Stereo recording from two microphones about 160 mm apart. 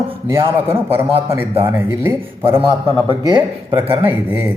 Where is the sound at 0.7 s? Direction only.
15° right (ahead or behind).